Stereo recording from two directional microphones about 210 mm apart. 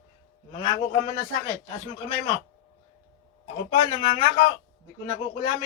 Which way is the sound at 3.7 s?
25° left (ahead or behind).